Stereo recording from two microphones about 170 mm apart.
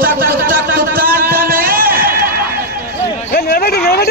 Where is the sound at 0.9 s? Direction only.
60° right (ahead or behind).